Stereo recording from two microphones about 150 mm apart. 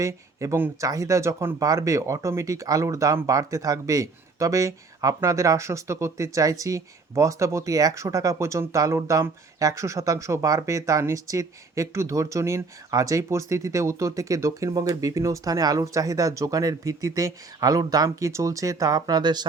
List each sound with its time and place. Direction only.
0.0 s speech: 20° right (ahead or behind)